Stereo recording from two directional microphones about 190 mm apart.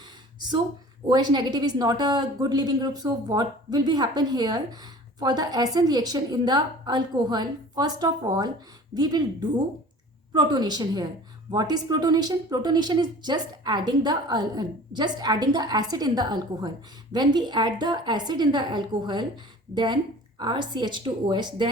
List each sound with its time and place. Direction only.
0.0 s a sound: 25° right (ahead or behind)
1.0 s speech: 25° right (ahead or behind)
10.3 s speech: 20° right (ahead or behind)